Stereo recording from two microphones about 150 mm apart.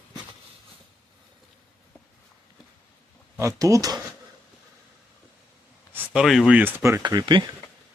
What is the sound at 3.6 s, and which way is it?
Speech, 25° right (ahead or behind).